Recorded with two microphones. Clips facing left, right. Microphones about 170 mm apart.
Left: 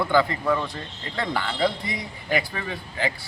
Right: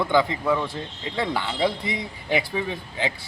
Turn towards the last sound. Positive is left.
turn(degrees=-15)  # may be behind; listen again after turning